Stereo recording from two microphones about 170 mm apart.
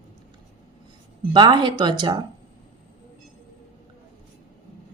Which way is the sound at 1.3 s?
25° right (ahead or behind).